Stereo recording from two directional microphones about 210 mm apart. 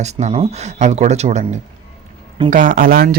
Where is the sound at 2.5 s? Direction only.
40° right (ahead or behind).